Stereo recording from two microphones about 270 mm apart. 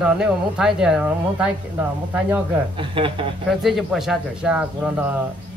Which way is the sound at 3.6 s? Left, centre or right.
Centre.